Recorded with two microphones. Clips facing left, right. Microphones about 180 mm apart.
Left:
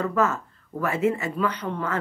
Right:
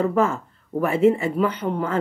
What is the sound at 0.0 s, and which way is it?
Speech, 25° right (ahead or behind).